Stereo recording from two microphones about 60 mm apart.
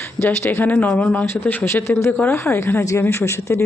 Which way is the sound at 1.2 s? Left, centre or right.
Left.